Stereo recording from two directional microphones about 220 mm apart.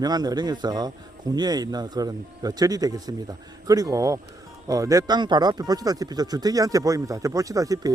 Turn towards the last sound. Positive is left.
turn(degrees=-15)  # may be behind; listen again after turning